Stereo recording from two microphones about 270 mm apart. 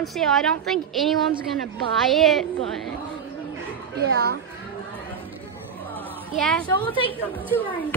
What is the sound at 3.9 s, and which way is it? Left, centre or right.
Speech, right.